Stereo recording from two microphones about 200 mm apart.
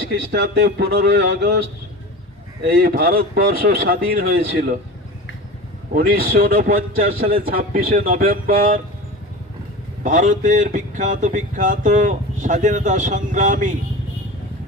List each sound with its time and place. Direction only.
0.1 s speech: 55° right (ahead or behind)
2.6 s speech: 50° right (ahead or behind)
5.9 s speech: 50° right (ahead or behind)
10.0 s speech: 40° right (ahead or behind)